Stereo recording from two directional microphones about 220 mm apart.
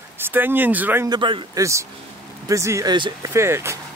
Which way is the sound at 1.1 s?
20° right (ahead or behind).